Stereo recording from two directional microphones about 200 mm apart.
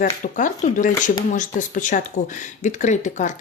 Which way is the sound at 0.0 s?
40° left (ahead or behind).